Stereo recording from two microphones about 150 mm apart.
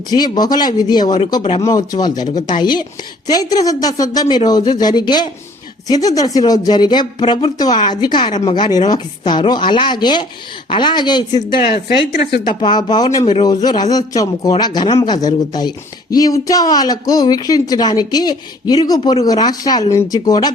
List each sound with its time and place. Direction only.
0.1 s speech: 25° left (ahead or behind)
1.4 s speech: 40° left (ahead or behind)
1.6 s speech: 25° left (ahead or behind)
11.7 s a woman's voice: 90° left
12.5 s speech: 30° left (ahead or behind)
13.2 s speech: 40° left (ahead or behind)
13.5 s speech: 25° left (ahead or behind)